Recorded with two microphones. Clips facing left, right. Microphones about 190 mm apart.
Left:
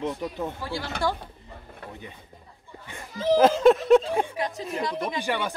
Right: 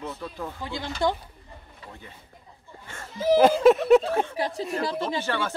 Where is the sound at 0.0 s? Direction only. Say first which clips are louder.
Left 5 dB; 15° left (ahead or behind).